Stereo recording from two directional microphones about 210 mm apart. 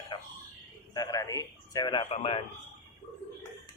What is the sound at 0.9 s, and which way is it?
A man's voice, 15° left (ahead or behind).